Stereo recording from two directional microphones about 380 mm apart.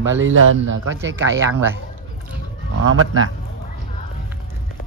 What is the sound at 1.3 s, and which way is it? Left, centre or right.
Speech, centre.